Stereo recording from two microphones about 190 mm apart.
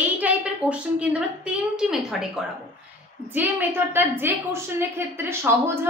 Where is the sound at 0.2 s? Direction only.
5° right (ahead or behind).